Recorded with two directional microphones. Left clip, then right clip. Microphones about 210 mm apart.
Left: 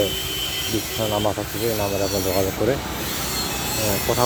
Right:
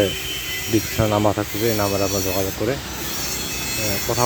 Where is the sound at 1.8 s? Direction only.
30° right (ahead or behind).